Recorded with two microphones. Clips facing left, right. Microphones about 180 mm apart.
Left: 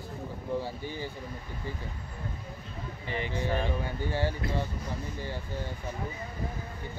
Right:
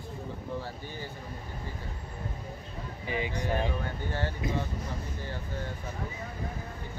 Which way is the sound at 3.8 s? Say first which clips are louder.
Left 3 dB; 10° left (ahead or behind).